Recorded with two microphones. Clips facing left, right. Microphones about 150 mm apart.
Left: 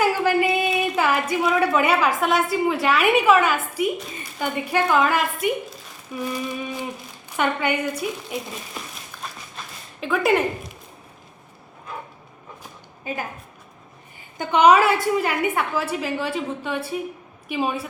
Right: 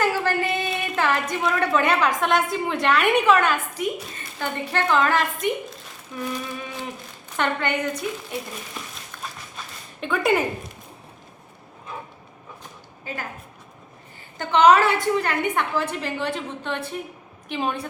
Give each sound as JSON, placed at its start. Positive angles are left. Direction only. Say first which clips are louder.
{"t": 0.0, "sound": "a sound", "louder": "left 3 dB", "side_deg": 10}
{"t": 0.4, "sound": "a woman's voice", "louder": "left 5 dB", "side_deg": 10}
{"t": 9.1, "sound": "a sound", "louder": "even", "side_deg": 5}
{"t": 10.0, "sound": "speech", "louder": "left 1 dB", "side_deg": 0}
{"t": 13.1, "sound": "a woman's voice", "louder": "left 4 dB", "side_deg": 15}
{"t": 14.3, "sound": "a woman's voice", "louder": "left 1 dB", "side_deg": 10}